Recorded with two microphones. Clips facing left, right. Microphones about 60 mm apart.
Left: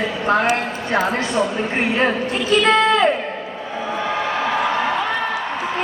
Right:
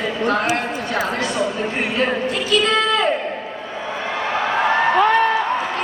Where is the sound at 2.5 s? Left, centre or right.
Left.